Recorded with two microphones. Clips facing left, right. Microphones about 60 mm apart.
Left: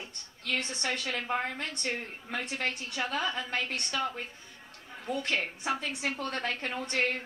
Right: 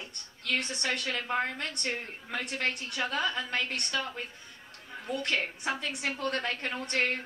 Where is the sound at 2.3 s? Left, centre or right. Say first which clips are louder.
Right 1 dB; centre.